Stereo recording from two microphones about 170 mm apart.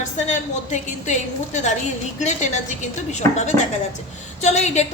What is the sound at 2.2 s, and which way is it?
A woman's voice, 45° left (ahead or behind).